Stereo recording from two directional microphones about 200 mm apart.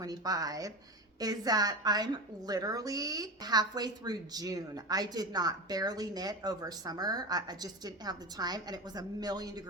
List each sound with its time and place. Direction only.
0.0 s a woman's voice: 20° right (ahead or behind)